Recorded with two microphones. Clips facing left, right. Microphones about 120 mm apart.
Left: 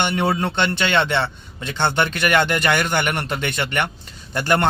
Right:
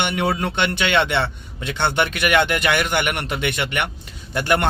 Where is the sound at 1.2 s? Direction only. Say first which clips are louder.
Even; 25° left (ahead or behind).